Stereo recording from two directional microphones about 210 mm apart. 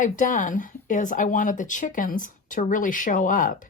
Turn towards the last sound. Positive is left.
turn(degrees=40)  # may be behind; listen again after turning